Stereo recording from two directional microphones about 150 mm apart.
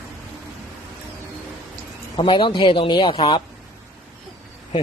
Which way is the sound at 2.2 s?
35° left (ahead or behind).